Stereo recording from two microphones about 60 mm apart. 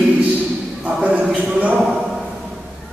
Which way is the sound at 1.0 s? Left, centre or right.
Centre.